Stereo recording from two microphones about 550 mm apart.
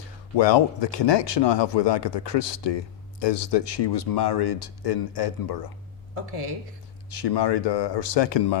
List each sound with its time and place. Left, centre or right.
0.3 s speech: left
7.1 s speech: left